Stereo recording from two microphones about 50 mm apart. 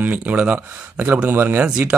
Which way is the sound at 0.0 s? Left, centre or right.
Right.